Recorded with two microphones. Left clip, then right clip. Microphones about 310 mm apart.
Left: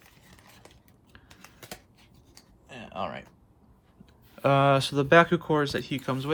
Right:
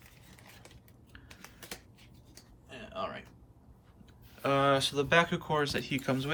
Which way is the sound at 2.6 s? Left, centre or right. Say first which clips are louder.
Left 4 dB; centre.